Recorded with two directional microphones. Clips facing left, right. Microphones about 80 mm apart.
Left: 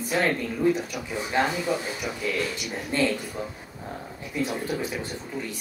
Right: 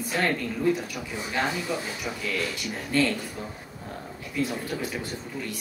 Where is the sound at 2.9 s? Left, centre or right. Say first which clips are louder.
Right 1 dB; left.